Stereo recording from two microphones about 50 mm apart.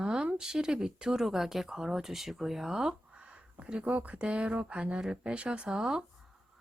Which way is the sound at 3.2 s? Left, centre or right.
Right.